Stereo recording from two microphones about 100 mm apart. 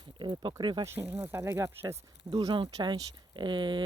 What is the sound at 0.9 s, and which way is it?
Speech, 20° right (ahead or behind).